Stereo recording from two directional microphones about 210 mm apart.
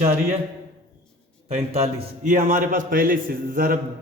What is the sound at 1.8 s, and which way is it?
A man's voice, 35° right (ahead or behind).